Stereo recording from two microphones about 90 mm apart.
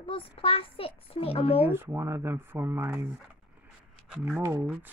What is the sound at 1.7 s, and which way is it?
Speech, 25° right (ahead or behind).